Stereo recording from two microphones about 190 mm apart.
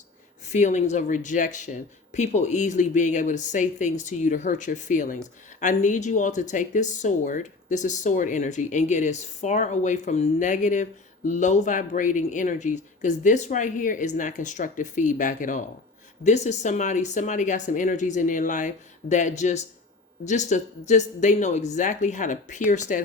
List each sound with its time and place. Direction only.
0.4 s speech: 35° left (ahead or behind)